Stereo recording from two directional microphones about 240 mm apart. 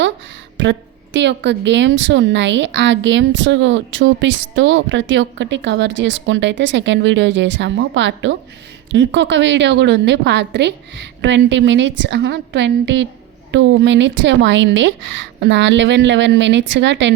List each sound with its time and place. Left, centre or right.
0.5 s a woman's voice: right